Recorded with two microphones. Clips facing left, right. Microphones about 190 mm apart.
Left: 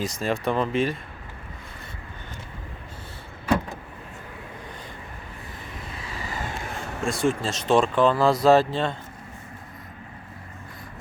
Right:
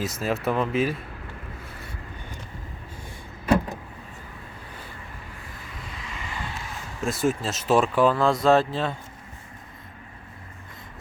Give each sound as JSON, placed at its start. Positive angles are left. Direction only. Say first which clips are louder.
{"t": 0.0, "sound": "speech", "louder": "even", "side_deg": -5}
{"t": 6.1, "sound": "a sound", "louder": "left 3 dB", "side_deg": 40}
{"t": 7.0, "sound": "speech", "louder": "even", "side_deg": -5}